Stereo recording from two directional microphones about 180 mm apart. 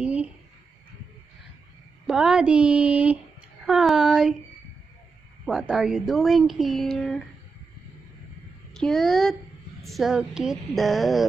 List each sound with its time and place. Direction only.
0.0 s a sound: 5° right (ahead or behind)
2.0 s a woman's voice: 5° right (ahead or behind)
5.4 s a woman's voice: centre (ahead or behind)
8.7 s a woman's voice: 5° left (ahead or behind)